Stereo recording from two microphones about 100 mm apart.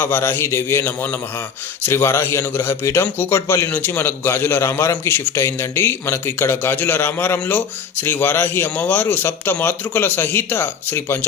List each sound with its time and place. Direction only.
0.0 s a man's voice: 25° left (ahead or behind)